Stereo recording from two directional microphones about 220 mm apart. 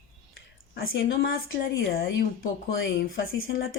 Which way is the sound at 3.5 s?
55° left (ahead or behind).